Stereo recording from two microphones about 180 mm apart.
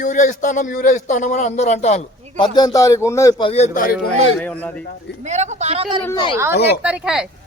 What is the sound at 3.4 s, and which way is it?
Speech, 35° left (ahead or behind).